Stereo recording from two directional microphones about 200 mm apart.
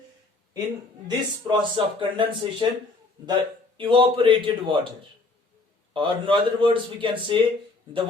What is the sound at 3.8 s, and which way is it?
A man's voice, 25° right (ahead or behind).